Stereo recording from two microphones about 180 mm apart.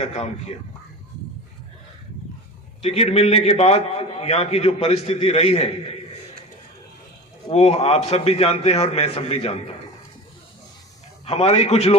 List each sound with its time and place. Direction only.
0.0 s a man's voice: 35° left (ahead or behind)
2.8 s a man's voice: 35° left (ahead or behind)
7.5 s a man's voice: 35° left (ahead or behind)
11.3 s a man's voice: 35° left (ahead or behind)